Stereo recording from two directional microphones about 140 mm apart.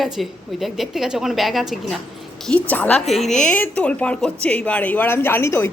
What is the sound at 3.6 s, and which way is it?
A woman's voice, 10° left (ahead or behind).